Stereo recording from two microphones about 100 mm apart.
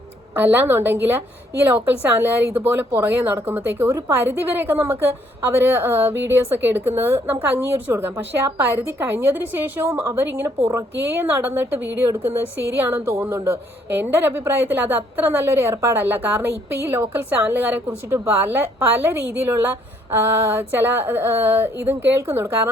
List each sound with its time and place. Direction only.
0.3 s a woman's voice: 20° right (ahead or behind)